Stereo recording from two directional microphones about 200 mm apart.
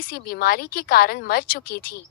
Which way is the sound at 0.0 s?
50° left (ahead or behind).